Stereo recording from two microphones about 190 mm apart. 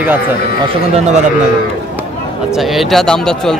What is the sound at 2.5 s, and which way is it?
Speech, centre (ahead or behind).